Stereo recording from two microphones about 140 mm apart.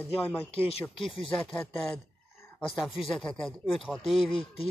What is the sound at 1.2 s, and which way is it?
Speech, 5° left (ahead or behind).